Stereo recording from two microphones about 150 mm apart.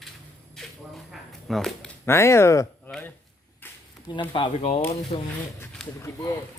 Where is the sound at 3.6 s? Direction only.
15° left (ahead or behind).